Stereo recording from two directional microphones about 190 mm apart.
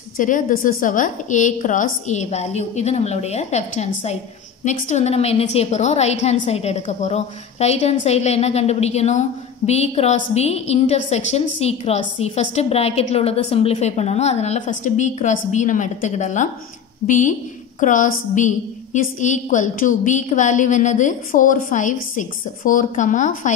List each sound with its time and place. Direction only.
0.2 s a woman's voice: 45° left (ahead or behind)